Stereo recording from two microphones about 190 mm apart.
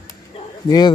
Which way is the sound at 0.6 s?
20° left (ahead or behind).